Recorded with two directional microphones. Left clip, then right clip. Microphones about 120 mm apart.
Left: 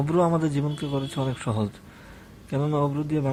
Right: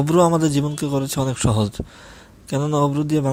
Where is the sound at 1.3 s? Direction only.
45° right (ahead or behind).